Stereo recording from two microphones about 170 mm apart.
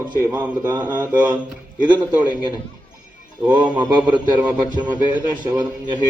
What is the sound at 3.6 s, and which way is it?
Speech, 10° right (ahead or behind).